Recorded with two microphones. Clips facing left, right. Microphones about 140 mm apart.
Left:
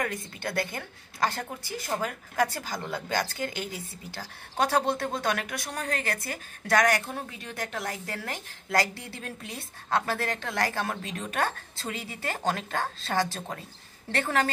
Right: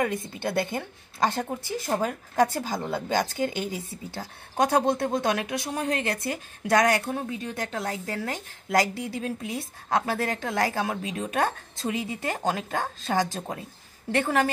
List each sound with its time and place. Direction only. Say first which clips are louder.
0.0 s a woman's voice: right 5 dB; 25° right (ahead or behind)